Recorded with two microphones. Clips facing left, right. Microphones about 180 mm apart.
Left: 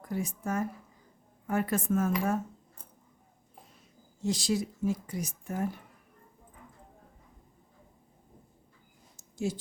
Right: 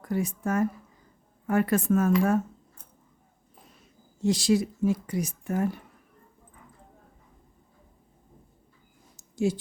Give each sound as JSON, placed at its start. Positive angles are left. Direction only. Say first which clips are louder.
{"t": 0.0, "sound": "speech", "louder": "right 5 dB", "side_deg": -70}
{"t": 4.2, "sound": "speech", "louder": "right 6 dB", "side_deg": -70}
{"t": 9.3, "sound": "a sound", "louder": "right 6 dB", "side_deg": -70}